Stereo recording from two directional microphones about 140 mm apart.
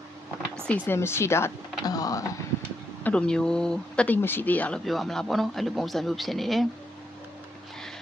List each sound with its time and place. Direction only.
0.7 s speech: 15° left (ahead or behind)
3.0 s speech: 10° left (ahead or behind)